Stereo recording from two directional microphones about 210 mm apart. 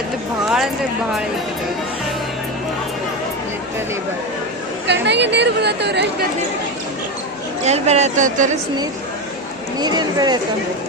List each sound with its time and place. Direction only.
0.4 s a sound: centre (ahead or behind)
4.9 s speech: 55° right (ahead or behind)
7.6 s speech: 30° right (ahead or behind)
9.8 s speech: 20° right (ahead or behind)